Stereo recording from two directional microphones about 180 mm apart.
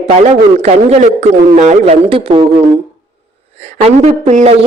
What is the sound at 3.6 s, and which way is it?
Speech, 35° right (ahead or behind).